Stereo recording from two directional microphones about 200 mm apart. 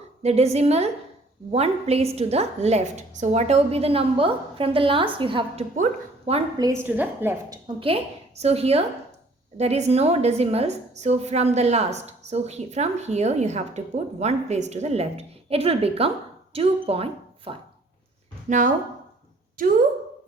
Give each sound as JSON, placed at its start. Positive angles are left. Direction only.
{"t": 0.2, "sound": "a woman's voice", "side_deg": -30}
{"t": 6.6, "sound": "a woman's voice", "side_deg": -15}
{"t": 7.8, "sound": "a woman's voice", "side_deg": -30}